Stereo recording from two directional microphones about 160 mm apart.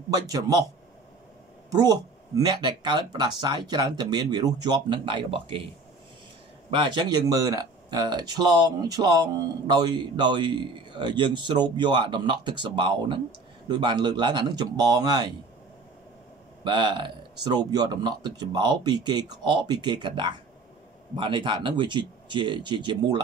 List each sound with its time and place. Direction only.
0.1 s speech: 25° right (ahead or behind)
1.7 s speech: 25° right (ahead or behind)
6.7 s speech: 30° right (ahead or behind)
16.6 s speech: 30° right (ahead or behind)